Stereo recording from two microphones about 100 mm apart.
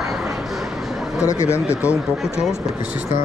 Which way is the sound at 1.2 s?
30° left (ahead or behind).